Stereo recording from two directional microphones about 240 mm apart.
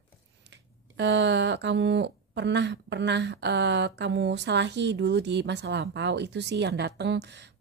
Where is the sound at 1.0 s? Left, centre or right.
Right.